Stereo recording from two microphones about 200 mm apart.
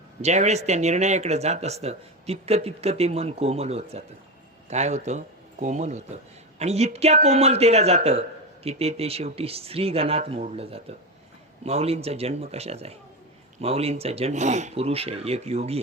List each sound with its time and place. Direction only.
0.2 s speech: 35° right (ahead or behind)